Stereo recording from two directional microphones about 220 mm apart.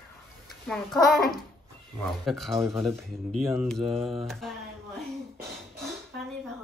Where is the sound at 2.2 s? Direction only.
Centre (ahead or behind).